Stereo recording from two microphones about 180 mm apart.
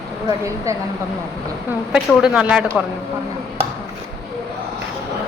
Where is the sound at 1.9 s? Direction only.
5° right (ahead or behind).